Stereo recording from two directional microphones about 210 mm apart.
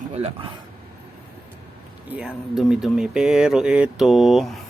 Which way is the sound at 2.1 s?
5° right (ahead or behind).